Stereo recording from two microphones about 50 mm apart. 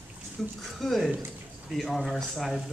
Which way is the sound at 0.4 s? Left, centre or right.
Centre.